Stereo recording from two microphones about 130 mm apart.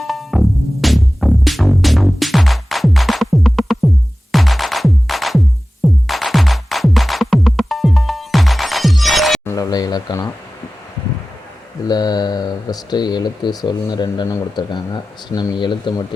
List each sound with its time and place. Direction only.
0.0 s music: centre (ahead or behind)
9.5 s a sound: 30° left (ahead or behind)
11.9 s speech: 30° left (ahead or behind)